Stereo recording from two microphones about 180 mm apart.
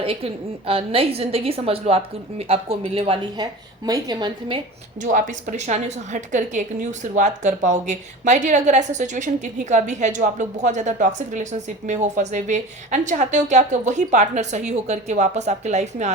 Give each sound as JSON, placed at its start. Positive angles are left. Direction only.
{"t": 0.0, "sound": "a woman's voice", "side_deg": -30}
{"t": 5.0, "sound": "a woman's voice", "side_deg": -45}